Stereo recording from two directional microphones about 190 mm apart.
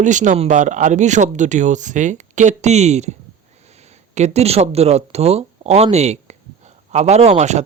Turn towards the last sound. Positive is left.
turn(degrees=-35)  # may be behind; listen again after turning